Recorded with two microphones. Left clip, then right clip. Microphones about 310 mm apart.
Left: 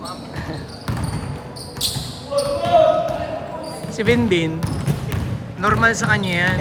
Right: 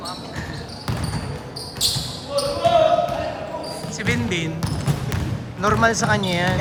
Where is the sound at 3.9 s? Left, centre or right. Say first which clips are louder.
Left 7 dB; centre.